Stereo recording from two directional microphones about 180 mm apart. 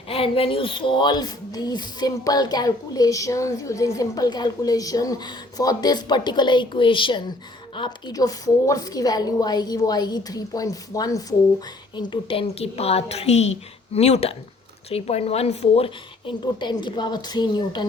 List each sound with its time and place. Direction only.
0.1 s a woman's voice: 30° left (ahead or behind)